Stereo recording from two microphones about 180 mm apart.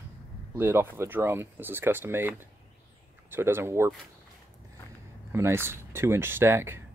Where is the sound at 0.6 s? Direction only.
15° right (ahead or behind).